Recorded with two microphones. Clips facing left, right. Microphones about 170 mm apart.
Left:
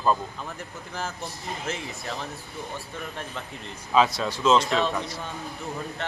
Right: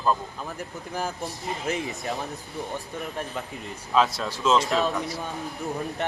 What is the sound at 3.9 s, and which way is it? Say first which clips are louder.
Speech: left 1 dB; centre (ahead or behind).